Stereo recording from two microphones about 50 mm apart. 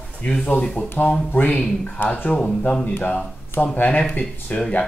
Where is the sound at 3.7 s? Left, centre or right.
Left.